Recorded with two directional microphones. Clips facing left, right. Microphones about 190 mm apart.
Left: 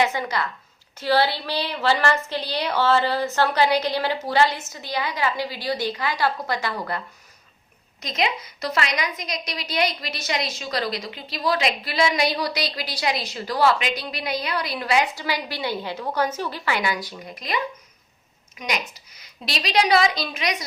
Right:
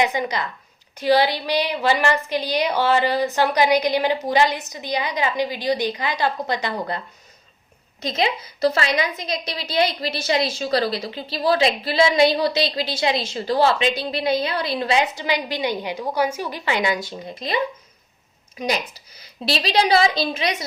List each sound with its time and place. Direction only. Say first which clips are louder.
0.0 s a woman's voice: right 1 dB; 15° right (ahead or behind)
8.0 s a woman's voice: right 3 dB; 30° right (ahead or behind)
18.6 s a woman's voice: right 5 dB; 30° right (ahead or behind)